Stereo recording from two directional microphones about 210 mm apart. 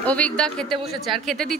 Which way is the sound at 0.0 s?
5° left (ahead or behind).